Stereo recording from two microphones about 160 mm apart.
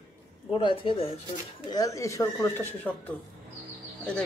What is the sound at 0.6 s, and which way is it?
Speech, 30° left (ahead or behind).